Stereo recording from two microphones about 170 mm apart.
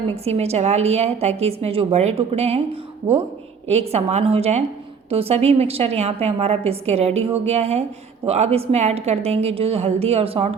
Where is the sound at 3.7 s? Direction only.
40° right (ahead or behind).